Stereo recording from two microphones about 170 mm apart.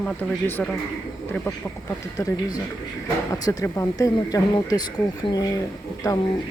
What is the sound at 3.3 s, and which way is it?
Speech, 20° left (ahead or behind).